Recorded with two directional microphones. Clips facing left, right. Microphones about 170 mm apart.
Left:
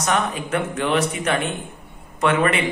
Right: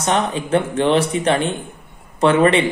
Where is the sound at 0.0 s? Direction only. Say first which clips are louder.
Right 3 dB; 30° right (ahead or behind).